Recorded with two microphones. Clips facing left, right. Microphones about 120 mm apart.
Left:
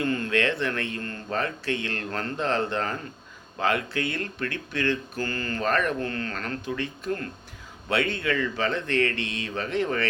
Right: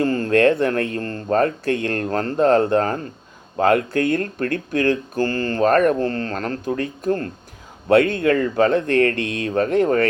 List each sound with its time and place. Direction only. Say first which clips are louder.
0.0 s speech: right 9 dB; 35° right (ahead or behind)